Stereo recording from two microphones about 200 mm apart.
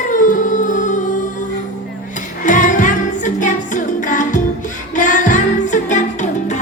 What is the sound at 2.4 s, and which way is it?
Music, 40° left (ahead or behind).